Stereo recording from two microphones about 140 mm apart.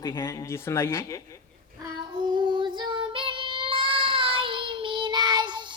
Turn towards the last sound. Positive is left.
turn(degrees=-30)  # may be behind; listen again after turning